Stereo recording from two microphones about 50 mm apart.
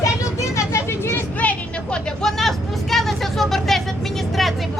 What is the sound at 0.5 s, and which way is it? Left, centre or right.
Vehicle, left.